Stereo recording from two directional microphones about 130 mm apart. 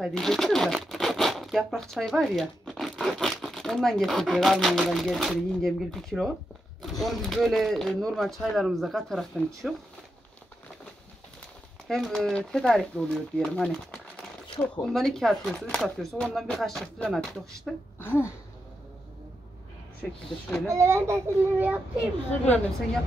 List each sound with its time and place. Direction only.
0.0 s speech: 5° left (ahead or behind)
11.9 s speech: centre (ahead or behind)
17.9 s speech: 15° left (ahead or behind)
20.0 s speech: 10° left (ahead or behind)
20.6 s speech: 20° right (ahead or behind)